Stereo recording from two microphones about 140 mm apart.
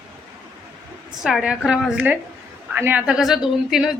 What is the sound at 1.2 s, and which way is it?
A woman's voice, 5° right (ahead or behind).